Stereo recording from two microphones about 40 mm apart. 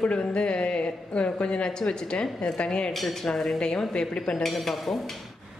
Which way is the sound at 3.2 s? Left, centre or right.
Centre.